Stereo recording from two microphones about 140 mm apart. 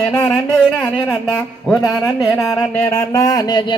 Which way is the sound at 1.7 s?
Centre (ahead or behind).